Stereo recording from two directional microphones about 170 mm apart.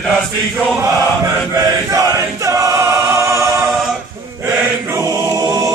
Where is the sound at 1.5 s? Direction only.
20° right (ahead or behind).